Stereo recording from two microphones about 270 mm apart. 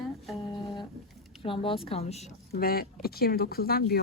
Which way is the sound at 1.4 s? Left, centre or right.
Centre.